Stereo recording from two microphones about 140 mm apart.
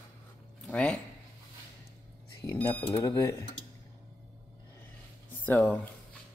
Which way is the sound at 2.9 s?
30° left (ahead or behind).